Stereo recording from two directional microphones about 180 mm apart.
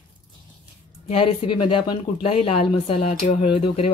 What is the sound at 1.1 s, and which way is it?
Speech, 30° left (ahead or behind).